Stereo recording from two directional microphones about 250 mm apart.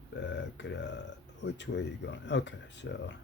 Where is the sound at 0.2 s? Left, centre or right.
Left.